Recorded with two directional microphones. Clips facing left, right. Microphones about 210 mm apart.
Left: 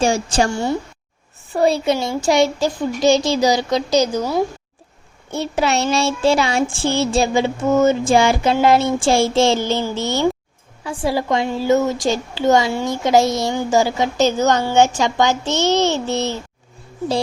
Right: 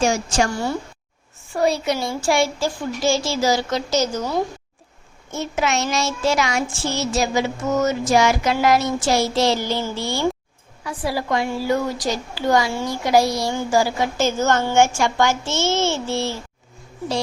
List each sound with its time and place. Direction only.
0.0 s a woman's voice: 30° left (ahead or behind); by 4.4 s 10° left (ahead or behind)
5.3 s a child's voice: 35° left (ahead or behind)